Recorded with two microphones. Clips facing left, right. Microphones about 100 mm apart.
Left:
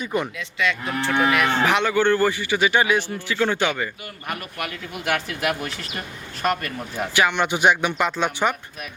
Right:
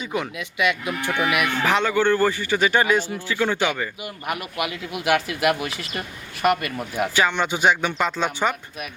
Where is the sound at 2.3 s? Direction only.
40° right (ahead or behind).